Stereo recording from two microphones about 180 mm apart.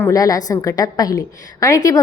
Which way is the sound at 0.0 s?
20° left (ahead or behind).